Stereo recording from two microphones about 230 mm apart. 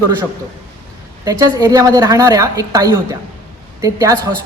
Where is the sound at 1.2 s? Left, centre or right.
Centre.